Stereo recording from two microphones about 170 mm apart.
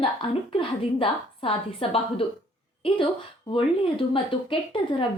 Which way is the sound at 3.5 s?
30° left (ahead or behind).